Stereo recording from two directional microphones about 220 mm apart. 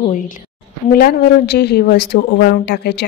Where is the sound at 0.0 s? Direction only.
35° left (ahead or behind).